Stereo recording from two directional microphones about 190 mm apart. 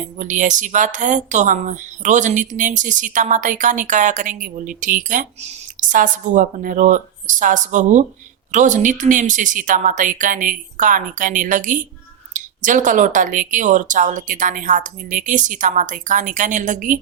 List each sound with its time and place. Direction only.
0.2 s speech: 40° right (ahead or behind)